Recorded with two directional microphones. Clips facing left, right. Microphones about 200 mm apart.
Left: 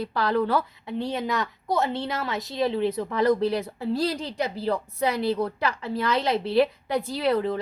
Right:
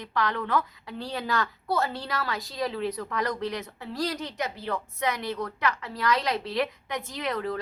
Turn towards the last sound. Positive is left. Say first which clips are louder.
# left 6 dB
turn(degrees=30)  # may be behind; listen again after turning